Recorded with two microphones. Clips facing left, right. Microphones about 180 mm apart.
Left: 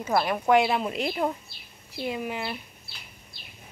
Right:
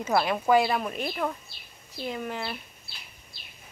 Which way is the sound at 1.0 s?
25° left (ahead or behind).